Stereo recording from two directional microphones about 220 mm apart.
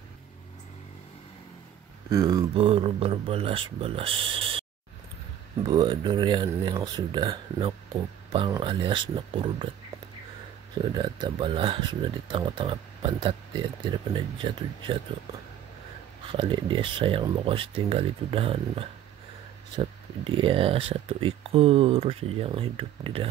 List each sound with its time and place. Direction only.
2.0 s speech: 15° right (ahead or behind)
5.7 s speech: 20° right (ahead or behind)
10.9 s speech: 20° right (ahead or behind)
16.3 s speech: 25° right (ahead or behind)